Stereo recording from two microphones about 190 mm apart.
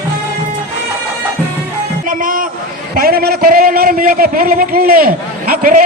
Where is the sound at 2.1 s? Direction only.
45° right (ahead or behind).